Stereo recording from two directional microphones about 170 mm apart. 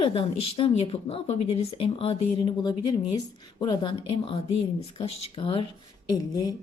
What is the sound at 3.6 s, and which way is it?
Speech, 25° left (ahead or behind).